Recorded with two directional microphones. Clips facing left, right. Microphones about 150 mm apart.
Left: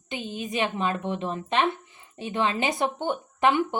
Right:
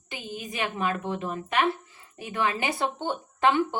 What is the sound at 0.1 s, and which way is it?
Speech, 20° left (ahead or behind).